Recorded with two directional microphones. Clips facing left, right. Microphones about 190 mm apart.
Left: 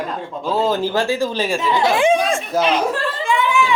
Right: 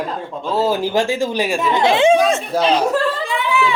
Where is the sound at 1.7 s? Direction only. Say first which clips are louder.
Right 2 dB; 25° right (ahead or behind).